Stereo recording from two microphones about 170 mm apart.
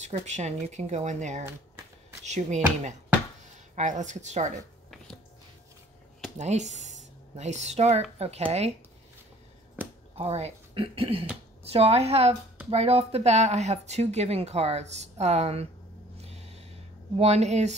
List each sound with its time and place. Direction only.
0.1 s speech: 40° right (ahead or behind)
6.3 s speech: 45° right (ahead or behind)
10.1 s speech: 40° right (ahead or behind)
16.2 s snort: 40° right (ahead or behind)
17.2 s speech: 40° right (ahead or behind)